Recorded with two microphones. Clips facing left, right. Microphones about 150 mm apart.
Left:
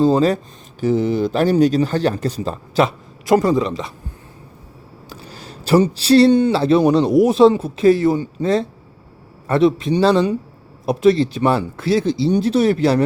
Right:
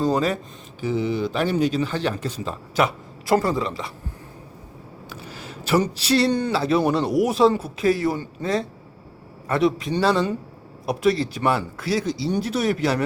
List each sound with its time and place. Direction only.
0.0 s speech: 30° left (ahead or behind)
0.8 s speech: 40° left (ahead or behind); by 3.9 s 20° left (ahead or behind)
5.0 s speech: 35° left (ahead or behind)